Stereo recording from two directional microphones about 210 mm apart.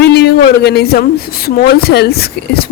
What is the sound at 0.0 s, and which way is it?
Speech, 50° left (ahead or behind).